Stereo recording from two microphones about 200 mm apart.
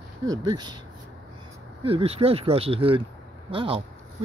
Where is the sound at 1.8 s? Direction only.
30° right (ahead or behind).